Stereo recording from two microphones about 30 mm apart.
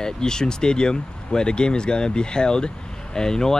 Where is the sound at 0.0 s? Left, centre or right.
Left.